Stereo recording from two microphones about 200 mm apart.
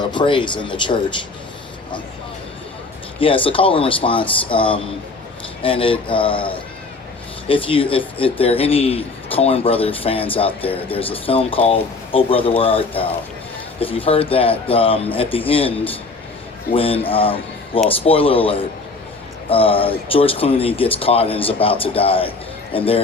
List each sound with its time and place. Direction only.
0.0 s a man's voice: 25° left (ahead or behind)
3.2 s a man's voice: 25° left (ahead or behind)